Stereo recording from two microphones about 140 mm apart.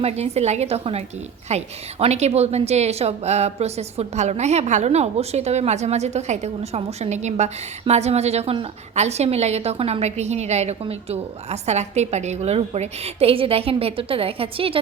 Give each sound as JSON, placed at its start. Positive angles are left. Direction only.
{"t": 0.0, "sound": "a woman's voice", "side_deg": -50}